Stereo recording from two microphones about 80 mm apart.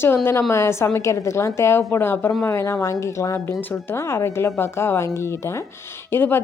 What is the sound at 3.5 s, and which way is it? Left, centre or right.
Speech, left.